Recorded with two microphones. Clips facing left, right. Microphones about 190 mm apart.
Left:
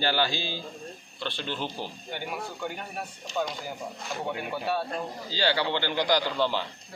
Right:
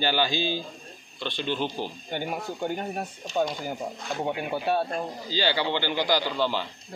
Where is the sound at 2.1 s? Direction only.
50° right (ahead or behind).